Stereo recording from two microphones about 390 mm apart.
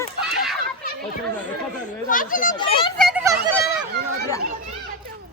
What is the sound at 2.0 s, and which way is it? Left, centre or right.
Speech, left.